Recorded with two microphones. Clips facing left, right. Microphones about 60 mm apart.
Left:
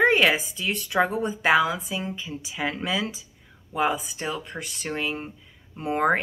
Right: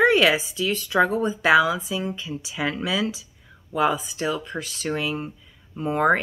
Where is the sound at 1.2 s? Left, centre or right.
Left.